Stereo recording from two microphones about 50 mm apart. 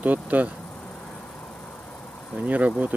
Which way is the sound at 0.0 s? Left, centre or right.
Right.